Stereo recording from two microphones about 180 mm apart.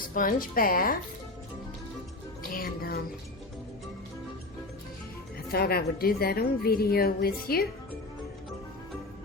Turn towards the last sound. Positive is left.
turn(degrees=55)  # may be behind; listen again after turning